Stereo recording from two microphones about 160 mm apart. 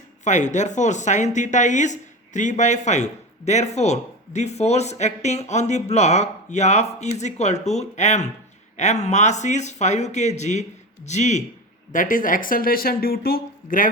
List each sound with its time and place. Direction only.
0.3 s speech: 50° left (ahead or behind)